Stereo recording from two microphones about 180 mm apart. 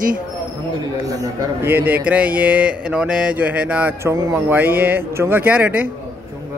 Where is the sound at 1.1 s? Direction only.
20° right (ahead or behind).